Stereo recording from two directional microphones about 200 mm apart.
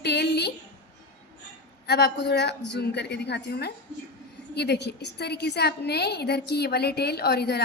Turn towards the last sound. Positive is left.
turn(degrees=55)  # may be behind; listen again after turning